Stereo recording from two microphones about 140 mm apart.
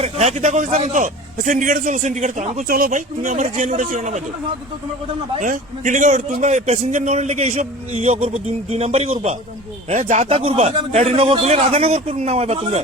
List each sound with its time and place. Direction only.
0.0 s a man's voice: 50° right (ahead or behind)
5.4 s a man's voice: 65° right (ahead or behind); by 9.3 s 50° right (ahead or behind)
9.9 s a man's voice: 60° right (ahead or behind)
10.2 s a man's voice: 45° right (ahead or behind)